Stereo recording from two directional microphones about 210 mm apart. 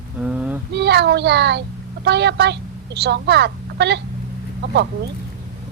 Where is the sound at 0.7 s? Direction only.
55° right (ahead or behind).